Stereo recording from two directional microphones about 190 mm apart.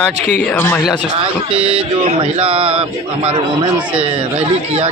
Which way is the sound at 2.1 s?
30° right (ahead or behind).